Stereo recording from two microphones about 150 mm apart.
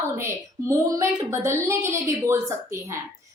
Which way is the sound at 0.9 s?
20° right (ahead or behind).